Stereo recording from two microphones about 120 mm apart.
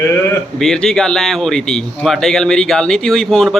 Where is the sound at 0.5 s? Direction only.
5° left (ahead or behind).